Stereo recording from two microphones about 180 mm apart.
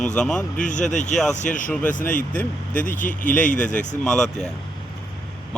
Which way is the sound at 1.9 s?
50° left (ahead or behind).